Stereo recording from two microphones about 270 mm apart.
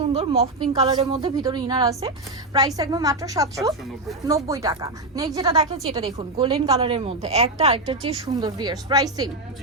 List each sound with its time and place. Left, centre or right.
0.1 s a woman's voice: right